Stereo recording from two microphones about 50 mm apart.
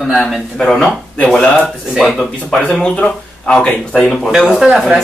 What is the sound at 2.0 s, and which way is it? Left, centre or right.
Speech, centre.